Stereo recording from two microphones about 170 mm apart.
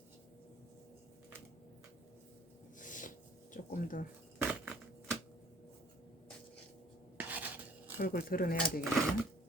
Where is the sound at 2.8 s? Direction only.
50° left (ahead or behind).